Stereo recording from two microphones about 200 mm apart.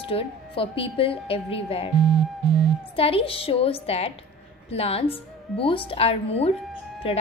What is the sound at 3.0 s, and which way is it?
A woman's voice, 30° left (ahead or behind).